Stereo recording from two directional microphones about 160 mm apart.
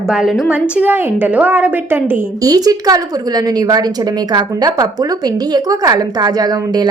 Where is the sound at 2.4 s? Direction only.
25° right (ahead or behind).